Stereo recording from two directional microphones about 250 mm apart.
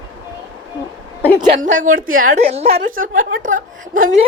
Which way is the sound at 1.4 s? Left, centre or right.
Right.